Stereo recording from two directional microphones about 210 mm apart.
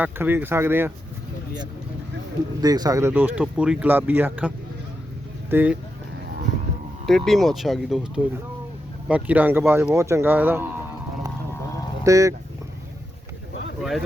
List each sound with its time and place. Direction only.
0.0 s speech: 10° right (ahead or behind)
2.6 s speech: 20° right (ahead or behind)
7.0 s speech: centre (ahead or behind)
12.0 s speech: 15° right (ahead or behind)